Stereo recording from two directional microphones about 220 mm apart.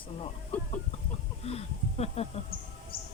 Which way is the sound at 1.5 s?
30° left (ahead or behind).